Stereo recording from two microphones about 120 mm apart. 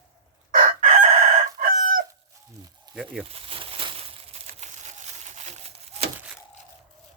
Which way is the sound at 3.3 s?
50° right (ahead or behind).